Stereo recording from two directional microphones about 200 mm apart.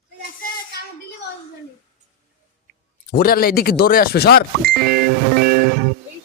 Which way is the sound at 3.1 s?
50° left (ahead or behind).